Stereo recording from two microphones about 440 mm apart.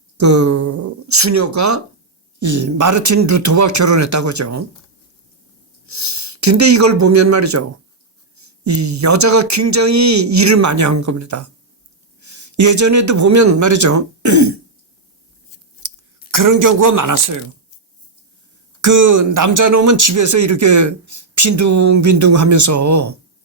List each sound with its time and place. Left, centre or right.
0.2 s speech: right
5.9 s speech: right
15.8 s a sound: right
16.3 s speech: right
18.8 s speech: right